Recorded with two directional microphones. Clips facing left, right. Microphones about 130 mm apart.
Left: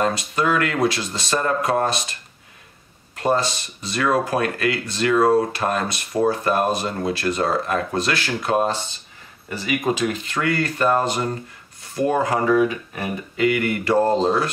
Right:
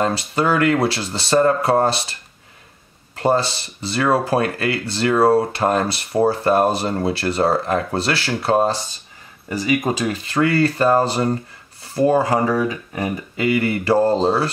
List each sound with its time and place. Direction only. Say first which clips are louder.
0.0 s speech: right 2 dB; 30° right (ahead or behind)
3.2 s speech: right 2 dB; 30° right (ahead or behind)